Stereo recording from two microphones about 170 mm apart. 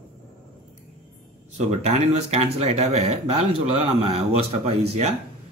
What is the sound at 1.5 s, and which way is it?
Speech, 40° right (ahead or behind).